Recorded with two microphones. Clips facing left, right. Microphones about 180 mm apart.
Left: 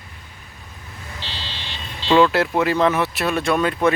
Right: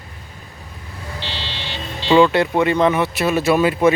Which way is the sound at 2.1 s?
Centre (ahead or behind).